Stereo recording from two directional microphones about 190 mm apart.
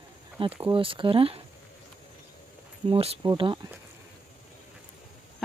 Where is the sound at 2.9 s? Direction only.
30° right (ahead or behind).